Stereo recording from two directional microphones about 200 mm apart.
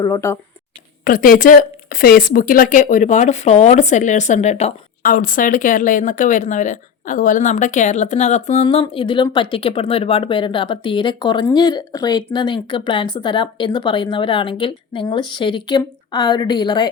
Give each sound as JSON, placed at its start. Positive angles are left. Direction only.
{"t": 0.0, "sound": "speech", "side_deg": 15}
{"t": 1.0, "sound": "speech", "side_deg": 45}